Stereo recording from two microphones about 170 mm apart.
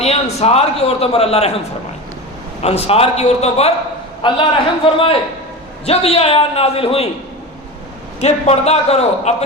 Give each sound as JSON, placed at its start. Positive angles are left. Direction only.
{"t": 0.0, "sound": "a man's voice", "side_deg": 40}
{"t": 8.2, "sound": "a man's voice", "side_deg": 40}